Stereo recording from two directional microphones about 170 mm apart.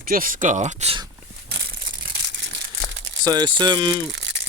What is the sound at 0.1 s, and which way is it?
Speech, 55° right (ahead or behind).